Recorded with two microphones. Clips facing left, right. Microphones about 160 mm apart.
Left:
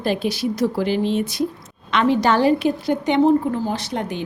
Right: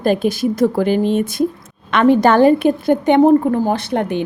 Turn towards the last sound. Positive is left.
turn(degrees=-60)  # may be behind; listen again after turning